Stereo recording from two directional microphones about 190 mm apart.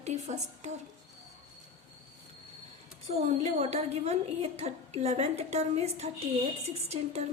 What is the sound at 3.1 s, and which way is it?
A woman's voice, 35° right (ahead or behind).